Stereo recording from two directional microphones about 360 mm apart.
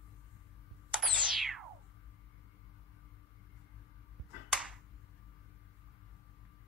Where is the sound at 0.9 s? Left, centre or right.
Centre.